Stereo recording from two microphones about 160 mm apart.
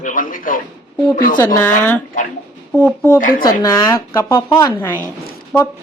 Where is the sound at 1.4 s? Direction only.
10° left (ahead or behind).